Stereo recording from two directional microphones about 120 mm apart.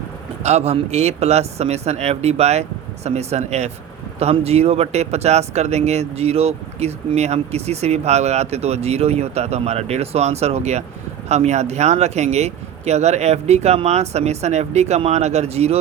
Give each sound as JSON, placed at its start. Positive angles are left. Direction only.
{"t": 0.4, "sound": "speech", "side_deg": -65}